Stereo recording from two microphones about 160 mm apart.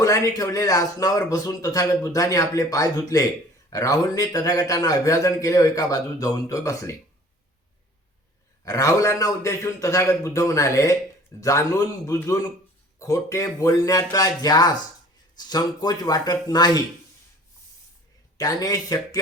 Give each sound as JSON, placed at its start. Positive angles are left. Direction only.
{"t": 0.0, "sound": "speech", "side_deg": 20}
{"t": 8.6, "sound": "speech", "side_deg": 20}
{"t": 18.3, "sound": "speech", "side_deg": 20}